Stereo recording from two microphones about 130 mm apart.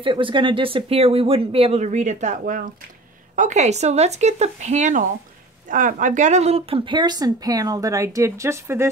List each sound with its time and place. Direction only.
0.0 s speech: 40° right (ahead or behind); by 2.7 s 90° right
3.3 s speech: 65° right (ahead or behind)
5.7 s a woman's voice: 85° right; by 8.8 s 20° right (ahead or behind)